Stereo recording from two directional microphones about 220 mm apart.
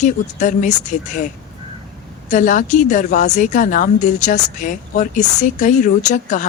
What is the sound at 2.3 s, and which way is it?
A woman's voice, 35° left (ahead or behind).